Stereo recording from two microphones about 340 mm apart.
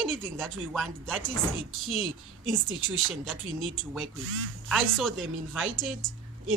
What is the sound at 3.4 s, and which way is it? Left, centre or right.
Speech, right.